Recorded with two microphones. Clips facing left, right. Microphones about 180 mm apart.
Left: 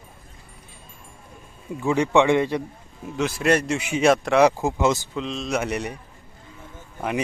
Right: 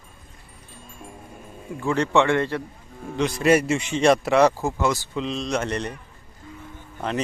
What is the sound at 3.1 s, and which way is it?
Speech, centre (ahead or behind).